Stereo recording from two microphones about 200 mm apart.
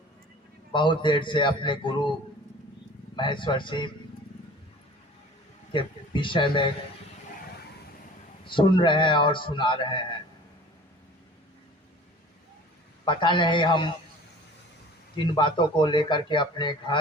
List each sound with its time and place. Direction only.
0.7 s speech: 25° left (ahead or behind)
3.2 s speech: 25° left (ahead or behind)
5.7 s speech: 25° left (ahead or behind)
8.4 s speech: 25° left (ahead or behind)
13.1 s speech: 25° left (ahead or behind)
15.1 s speech: 25° left (ahead or behind)